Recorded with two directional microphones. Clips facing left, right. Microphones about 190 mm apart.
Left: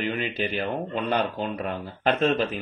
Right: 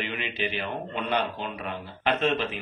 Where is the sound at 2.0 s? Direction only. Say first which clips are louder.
Left 3 dB; 40° left (ahead or behind).